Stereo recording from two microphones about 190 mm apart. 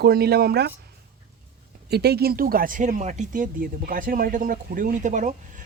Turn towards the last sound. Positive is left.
turn(degrees=-40)  # may be behind; listen again after turning